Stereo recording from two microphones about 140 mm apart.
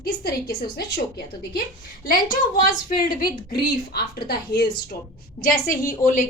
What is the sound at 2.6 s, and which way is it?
A woman's voice, 90° left.